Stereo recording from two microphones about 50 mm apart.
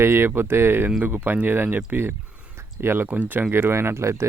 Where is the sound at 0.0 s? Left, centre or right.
Right.